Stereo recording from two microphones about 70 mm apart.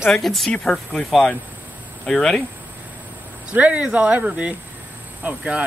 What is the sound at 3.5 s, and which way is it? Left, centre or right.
Speech, centre.